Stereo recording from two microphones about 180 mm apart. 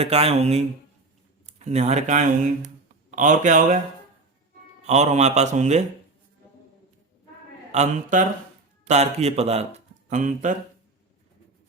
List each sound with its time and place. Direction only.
0.0 s speech: 35° right (ahead or behind)
4.9 s speech: 40° right (ahead or behind)
7.7 s speech: 40° right (ahead or behind)